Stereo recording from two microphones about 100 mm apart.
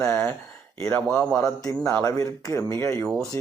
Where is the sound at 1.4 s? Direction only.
35° left (ahead or behind).